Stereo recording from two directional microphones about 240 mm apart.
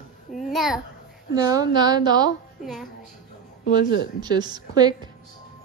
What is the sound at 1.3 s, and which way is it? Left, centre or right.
A woman's voice, centre.